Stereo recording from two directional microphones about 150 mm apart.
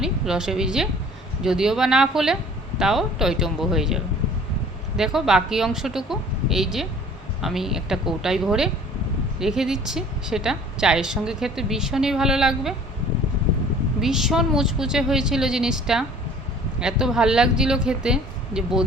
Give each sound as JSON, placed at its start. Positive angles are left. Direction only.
{"t": 0.0, "sound": "a woman's voice", "side_deg": -5}
{"t": 14.0, "sound": "a woman's voice", "side_deg": 0}